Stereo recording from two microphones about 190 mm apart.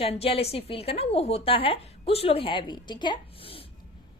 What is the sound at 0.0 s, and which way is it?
A woman's voice, 30° left (ahead or behind).